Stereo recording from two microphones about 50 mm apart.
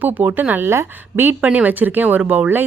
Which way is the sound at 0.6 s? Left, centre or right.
Right.